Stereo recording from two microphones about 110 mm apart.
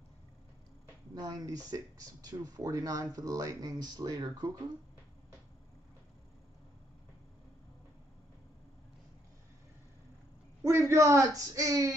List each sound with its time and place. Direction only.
1.1 s speech: 35° right (ahead or behind)
10.6 s a man's voice: 25° right (ahead or behind)